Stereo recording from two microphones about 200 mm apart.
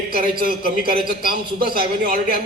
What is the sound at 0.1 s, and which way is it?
A man's voice, 45° right (ahead or behind).